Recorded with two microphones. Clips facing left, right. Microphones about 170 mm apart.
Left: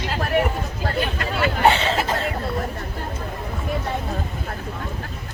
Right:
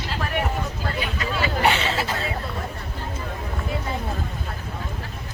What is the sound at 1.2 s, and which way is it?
Hubbub, 55° left (ahead or behind).